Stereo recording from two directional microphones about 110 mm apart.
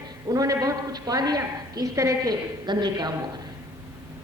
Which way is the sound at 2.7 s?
45° right (ahead or behind).